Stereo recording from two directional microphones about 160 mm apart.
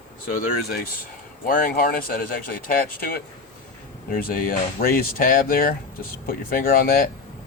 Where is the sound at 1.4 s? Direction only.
60° left (ahead or behind).